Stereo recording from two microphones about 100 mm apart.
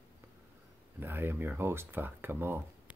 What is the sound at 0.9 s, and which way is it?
Speech, 20° right (ahead or behind).